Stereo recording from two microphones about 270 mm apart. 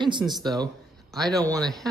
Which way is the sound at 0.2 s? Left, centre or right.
Centre.